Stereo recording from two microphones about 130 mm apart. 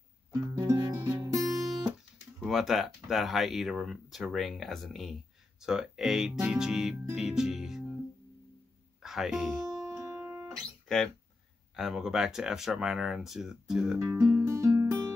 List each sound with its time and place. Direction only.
0.3 s music: 25° right (ahead or behind)
1.4 s music: centre (ahead or behind)
2.4 s speech: centre (ahead or behind)
7.2 s music: 5° right (ahead or behind)
9.0 s speech: 5° right (ahead or behind)
9.7 s music: 25° right (ahead or behind)
11.7 s speech: centre (ahead or behind)
14.2 s music: 20° right (ahead or behind)